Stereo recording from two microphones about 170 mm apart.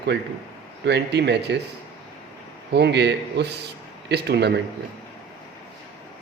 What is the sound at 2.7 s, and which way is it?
A man's voice, 85° right.